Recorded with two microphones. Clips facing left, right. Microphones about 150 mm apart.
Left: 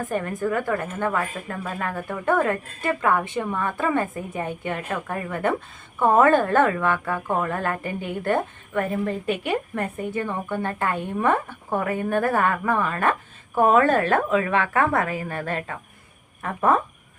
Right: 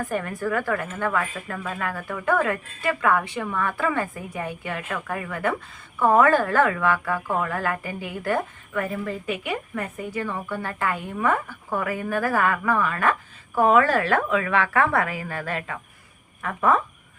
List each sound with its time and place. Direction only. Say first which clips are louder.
0.0 s a woman's voice: left 1 dB; 25° left (ahead or behind)
1.1 s a woman's voice: even; 35° left (ahead or behind)
15.5 s speech: left 1 dB; 35° left (ahead or behind)